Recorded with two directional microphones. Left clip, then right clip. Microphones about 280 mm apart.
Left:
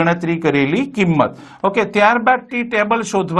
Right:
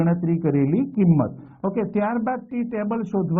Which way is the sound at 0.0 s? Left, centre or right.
Centre.